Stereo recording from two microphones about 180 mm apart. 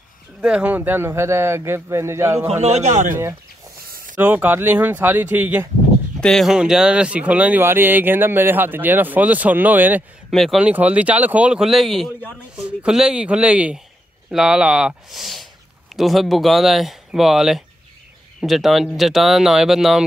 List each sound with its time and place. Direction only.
0.4 s speech: 5° right (ahead or behind)
2.4 s a man's voice: 35° right (ahead or behind)
4.2 s speech: 10° right (ahead or behind)
6.2 s speech: centre (ahead or behind)